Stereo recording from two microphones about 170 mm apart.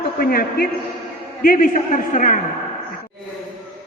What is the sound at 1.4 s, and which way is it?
Speech, 55° left (ahead or behind).